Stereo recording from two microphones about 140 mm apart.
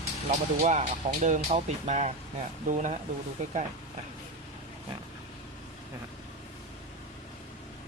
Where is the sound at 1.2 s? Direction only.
55° right (ahead or behind).